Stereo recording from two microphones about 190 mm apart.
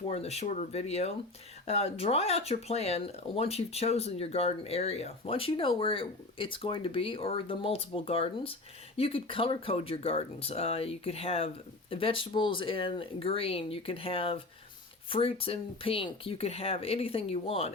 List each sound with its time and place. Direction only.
0.1 s speech: 35° left (ahead or behind)